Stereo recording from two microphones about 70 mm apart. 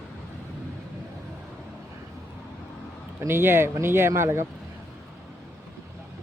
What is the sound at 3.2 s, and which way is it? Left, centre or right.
Speech, right.